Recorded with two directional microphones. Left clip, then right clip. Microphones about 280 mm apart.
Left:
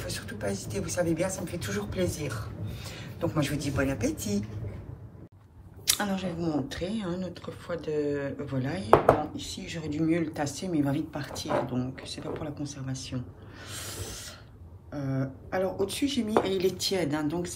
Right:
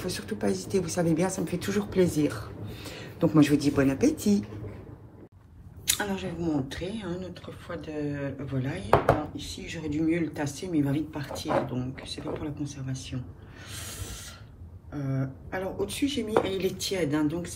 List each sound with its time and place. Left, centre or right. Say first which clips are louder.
0.0 s speech: right 3 dB; right
5.9 s speech: left 1 dB; centre
13.7 s a sound: left 1 dB; centre
15.0 s speech: left 1 dB; centre